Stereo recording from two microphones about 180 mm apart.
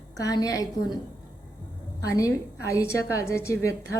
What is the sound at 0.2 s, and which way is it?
Speech, 20° left (ahead or behind).